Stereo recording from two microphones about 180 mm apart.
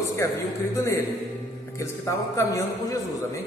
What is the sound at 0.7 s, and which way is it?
A man's voice, 15° left (ahead or behind).